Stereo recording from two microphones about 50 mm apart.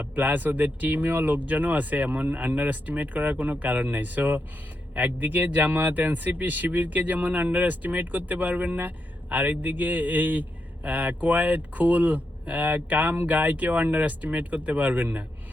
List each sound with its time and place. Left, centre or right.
0.0 s speech: right